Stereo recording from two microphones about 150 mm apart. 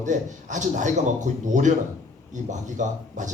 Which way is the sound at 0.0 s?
55° right (ahead or behind).